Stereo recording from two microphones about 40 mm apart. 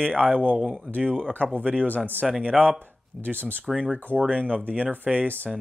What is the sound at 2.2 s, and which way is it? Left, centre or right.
Speech, centre.